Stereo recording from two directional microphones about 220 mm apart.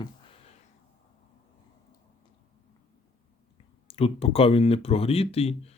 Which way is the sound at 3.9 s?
25° left (ahead or behind).